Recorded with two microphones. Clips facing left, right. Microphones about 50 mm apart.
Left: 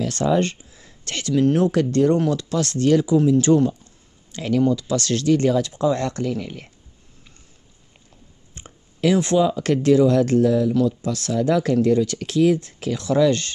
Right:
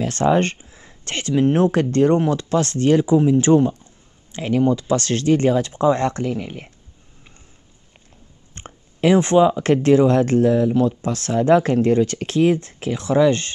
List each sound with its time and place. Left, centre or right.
0.0 s speech: right
8.6 s a sound: right
9.0 s speech: right